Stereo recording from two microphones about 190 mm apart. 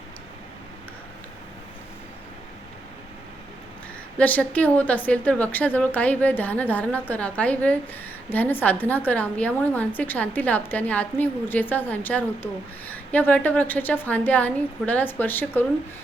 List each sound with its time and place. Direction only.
4.2 s a woman's voice: 10° left (ahead or behind)